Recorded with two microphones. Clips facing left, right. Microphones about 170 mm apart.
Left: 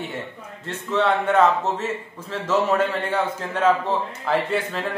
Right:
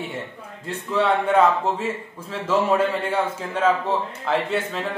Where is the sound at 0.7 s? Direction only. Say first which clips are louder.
Even; 5° right (ahead or behind).